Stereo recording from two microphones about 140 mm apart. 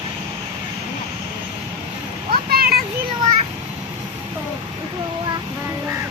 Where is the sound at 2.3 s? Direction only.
90° right.